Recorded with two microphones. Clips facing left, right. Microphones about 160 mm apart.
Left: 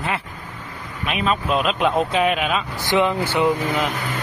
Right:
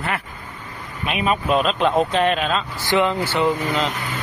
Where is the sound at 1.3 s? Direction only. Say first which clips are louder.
Right 2 dB; centre (ahead or behind).